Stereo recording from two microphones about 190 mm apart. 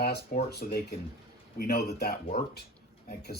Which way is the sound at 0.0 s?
55° left (ahead or behind).